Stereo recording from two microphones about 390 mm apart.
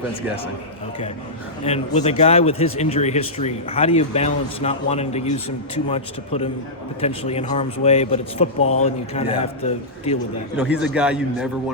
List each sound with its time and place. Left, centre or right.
1.6 s a man's voice: centre
10.6 s a man's voice: centre